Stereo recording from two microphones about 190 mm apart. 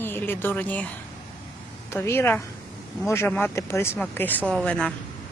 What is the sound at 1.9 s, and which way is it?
Speech, 15° left (ahead or behind).